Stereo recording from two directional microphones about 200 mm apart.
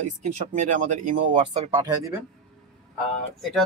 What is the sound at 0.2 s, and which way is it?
Speech, 35° right (ahead or behind).